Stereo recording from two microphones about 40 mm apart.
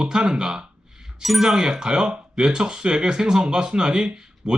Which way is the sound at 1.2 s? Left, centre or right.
Centre.